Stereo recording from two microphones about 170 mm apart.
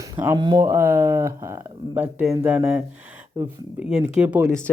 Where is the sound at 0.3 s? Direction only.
25° right (ahead or behind); by 4.4 s 5° right (ahead or behind).